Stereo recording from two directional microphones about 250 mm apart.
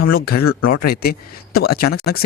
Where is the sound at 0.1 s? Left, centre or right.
Left.